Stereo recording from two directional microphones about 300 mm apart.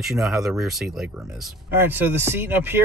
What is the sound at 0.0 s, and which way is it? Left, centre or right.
Speech, centre.